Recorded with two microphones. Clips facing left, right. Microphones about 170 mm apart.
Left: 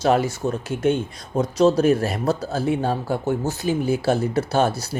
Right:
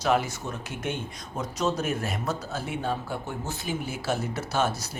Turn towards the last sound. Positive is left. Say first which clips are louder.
# left 7 dB
turn(degrees=30)  # may be behind; listen again after turning